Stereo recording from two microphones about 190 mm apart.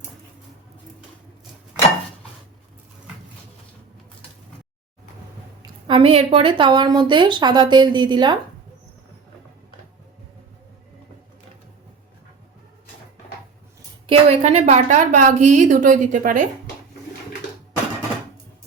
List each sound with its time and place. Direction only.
5.6 s a woman's voice: 25° right (ahead or behind)
14.1 s a woman's voice: 35° right (ahead or behind)